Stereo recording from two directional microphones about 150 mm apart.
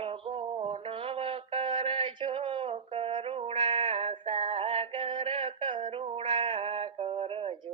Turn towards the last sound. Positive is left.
turn(degrees=-35)  # may be behind; listen again after turning